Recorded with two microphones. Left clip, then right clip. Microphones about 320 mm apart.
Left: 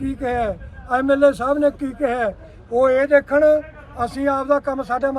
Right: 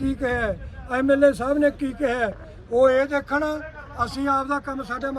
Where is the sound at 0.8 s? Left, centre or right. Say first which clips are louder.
Left 3 dB; centre.